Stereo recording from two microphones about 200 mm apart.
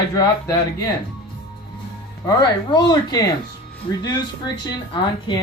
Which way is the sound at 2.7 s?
20° left (ahead or behind).